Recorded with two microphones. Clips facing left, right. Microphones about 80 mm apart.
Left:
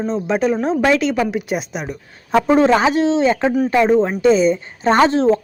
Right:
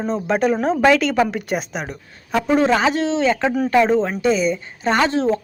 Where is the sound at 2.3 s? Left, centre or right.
Left.